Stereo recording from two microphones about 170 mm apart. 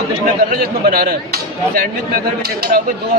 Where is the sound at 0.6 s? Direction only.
60° right (ahead or behind).